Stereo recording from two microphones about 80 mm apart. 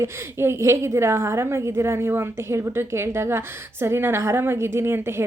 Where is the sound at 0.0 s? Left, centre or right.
Right.